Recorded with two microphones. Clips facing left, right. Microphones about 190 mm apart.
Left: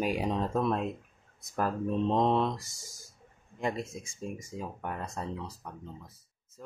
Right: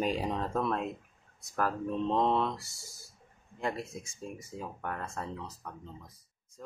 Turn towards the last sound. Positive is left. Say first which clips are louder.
# left 2 dB
turn(degrees=15)  # may be behind; listen again after turning